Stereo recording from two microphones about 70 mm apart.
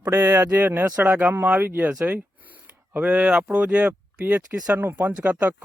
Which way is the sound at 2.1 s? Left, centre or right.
Right.